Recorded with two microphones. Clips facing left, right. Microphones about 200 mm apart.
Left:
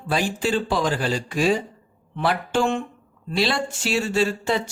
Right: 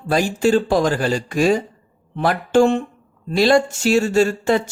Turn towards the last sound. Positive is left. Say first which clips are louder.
# right 6 dB
turn(degrees=-50)  # may be behind; listen again after turning